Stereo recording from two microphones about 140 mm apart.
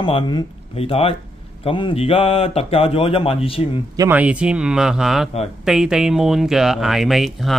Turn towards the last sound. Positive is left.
turn(degrees=0)  # may be behind; listen again after turning